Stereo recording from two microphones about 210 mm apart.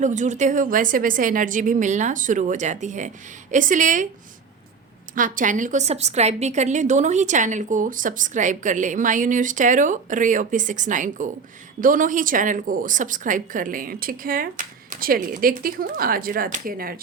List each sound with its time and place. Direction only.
0.0 s a woman's voice: 35° right (ahead or behind)
5.1 s a woman's voice: 40° right (ahead or behind)